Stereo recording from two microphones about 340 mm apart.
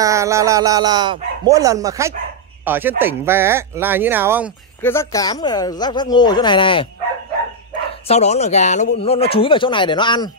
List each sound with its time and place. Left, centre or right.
0.0 s speech: centre
4.8 s speech: centre
8.1 s speech: centre